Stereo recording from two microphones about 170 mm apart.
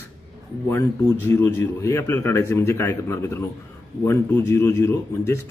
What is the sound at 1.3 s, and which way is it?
Speech, 15° left (ahead or behind).